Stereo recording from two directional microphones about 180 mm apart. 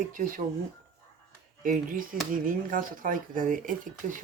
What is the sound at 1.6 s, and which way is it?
Speech, 50° right (ahead or behind).